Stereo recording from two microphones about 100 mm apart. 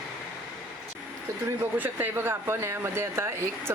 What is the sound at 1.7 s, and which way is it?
Speech, 20° right (ahead or behind).